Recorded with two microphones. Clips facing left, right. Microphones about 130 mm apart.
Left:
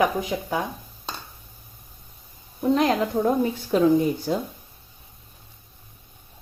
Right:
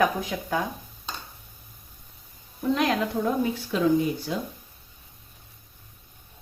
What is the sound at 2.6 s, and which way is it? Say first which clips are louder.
Speech: left 4 dB; 35° left (ahead or behind).